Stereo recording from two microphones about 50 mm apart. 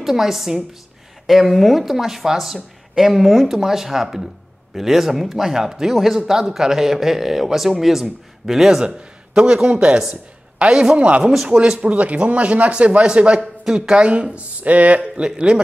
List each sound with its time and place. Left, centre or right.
0.0 s speech: centre; by 15.2 s right
15.2 s speech: centre